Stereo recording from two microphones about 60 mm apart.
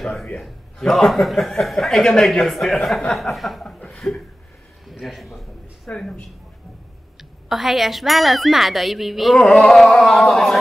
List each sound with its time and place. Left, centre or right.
0.0 s a man's voice: centre
3.9 s chuckle: centre
5.0 s a man's voice: centre
5.9 s a sound: centre
7.2 s a man's voice: centre
9.4 s a sound: centre